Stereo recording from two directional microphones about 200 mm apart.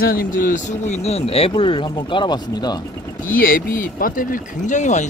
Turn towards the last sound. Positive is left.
turn(degrees=35)  # may be behind; listen again after turning